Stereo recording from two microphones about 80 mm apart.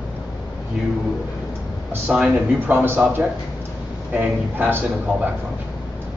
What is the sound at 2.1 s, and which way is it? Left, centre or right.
Speech, centre.